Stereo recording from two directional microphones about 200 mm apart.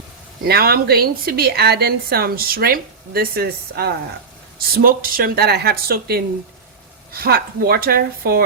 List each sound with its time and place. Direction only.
0.4 s a woman's voice: 50° right (ahead or behind)